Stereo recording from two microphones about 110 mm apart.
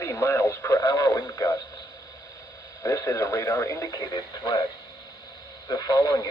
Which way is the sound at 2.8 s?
30° left (ahead or behind).